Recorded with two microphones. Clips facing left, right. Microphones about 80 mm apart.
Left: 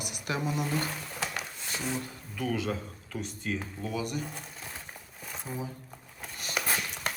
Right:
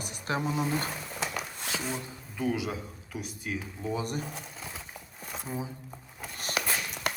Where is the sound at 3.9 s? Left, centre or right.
Right.